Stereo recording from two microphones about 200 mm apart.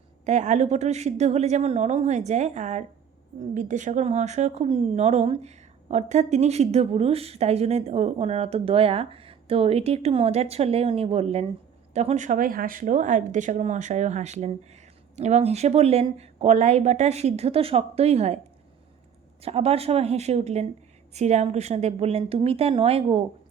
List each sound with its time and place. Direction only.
0.3 s a woman's voice: 35° right (ahead or behind)
19.4 s a woman's voice: 30° right (ahead or behind)